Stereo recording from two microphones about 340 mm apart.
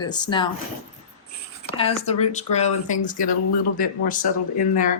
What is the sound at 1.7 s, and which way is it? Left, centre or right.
Speech, centre.